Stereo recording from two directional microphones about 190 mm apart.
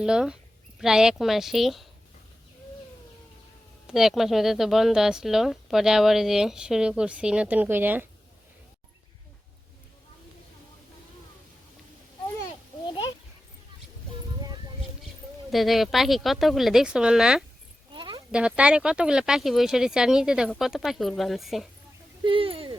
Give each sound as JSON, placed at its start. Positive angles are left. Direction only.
{"t": 0.0, "sound": "a woman's voice", "side_deg": -5}
{"t": 3.8, "sound": "a woman's voice", "side_deg": 0}
{"t": 15.4, "sound": "a woman's voice", "side_deg": 0}
{"t": 17.9, "sound": "a sound", "side_deg": -25}
{"t": 18.3, "sound": "a woman's voice", "side_deg": -5}
{"t": 22.2, "sound": "speech", "side_deg": -30}